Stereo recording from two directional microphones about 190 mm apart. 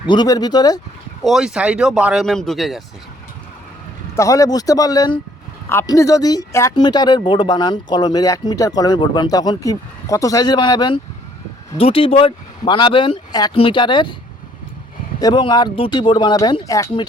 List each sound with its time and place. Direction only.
0.1 s speech: 20° left (ahead or behind)
1.2 s speech: centre (ahead or behind)
4.1 s speech: 15° left (ahead or behind)
15.2 s speech: 25° left (ahead or behind)